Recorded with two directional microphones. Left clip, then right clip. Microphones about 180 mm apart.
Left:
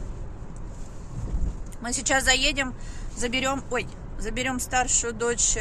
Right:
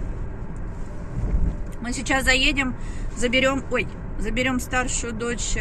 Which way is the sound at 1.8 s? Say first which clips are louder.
Right 1 dB; 15° left (ahead or behind).